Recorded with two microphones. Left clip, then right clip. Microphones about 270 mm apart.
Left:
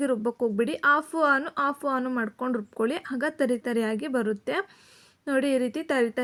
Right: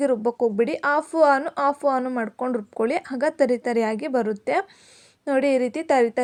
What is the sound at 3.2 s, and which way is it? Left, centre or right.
A woman's voice, centre.